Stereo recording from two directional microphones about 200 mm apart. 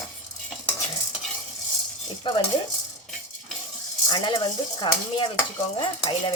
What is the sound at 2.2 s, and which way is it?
Cutlery, 25° left (ahead or behind).